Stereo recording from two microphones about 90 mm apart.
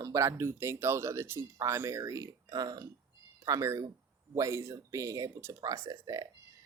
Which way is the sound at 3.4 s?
35° right (ahead or behind).